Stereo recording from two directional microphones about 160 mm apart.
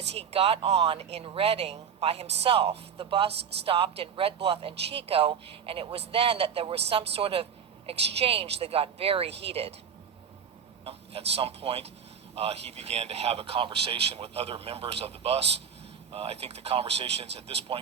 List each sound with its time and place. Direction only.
0.1 s a man's voice: 40° right (ahead or behind)
10.8 s a man's voice: 40° right (ahead or behind)